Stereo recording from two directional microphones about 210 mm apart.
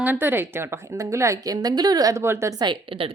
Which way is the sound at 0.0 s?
10° right (ahead or behind).